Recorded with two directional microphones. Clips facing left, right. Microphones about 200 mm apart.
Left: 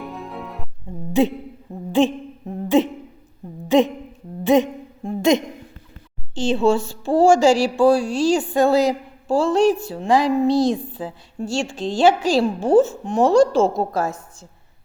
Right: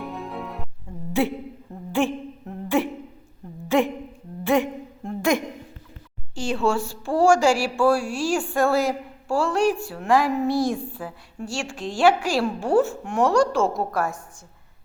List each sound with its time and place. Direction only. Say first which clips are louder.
0.0 s music: even; centre (ahead or behind)
1.2 s speech: left 5 dB; 20° left (ahead or behind)
1.9 s a sound: left 5 dB; 20° left (ahead or behind)
3.7 s humming: left 5 dB; 20° left (ahead or behind)
4.4 s a sound: left 5 dB; 20° left (ahead or behind)
6.3 s speech: left 5 dB; 20° left (ahead or behind)